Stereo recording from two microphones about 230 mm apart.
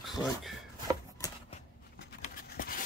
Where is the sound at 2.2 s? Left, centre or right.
Left.